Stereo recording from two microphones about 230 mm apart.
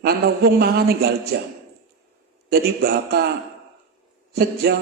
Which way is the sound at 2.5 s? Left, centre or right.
Right.